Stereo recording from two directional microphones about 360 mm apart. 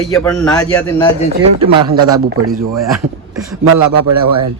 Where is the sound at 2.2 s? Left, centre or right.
Right.